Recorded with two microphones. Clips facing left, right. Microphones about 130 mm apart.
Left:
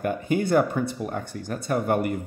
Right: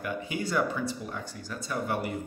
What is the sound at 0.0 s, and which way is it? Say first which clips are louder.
Speech: left 8 dB; 50° left (ahead or behind).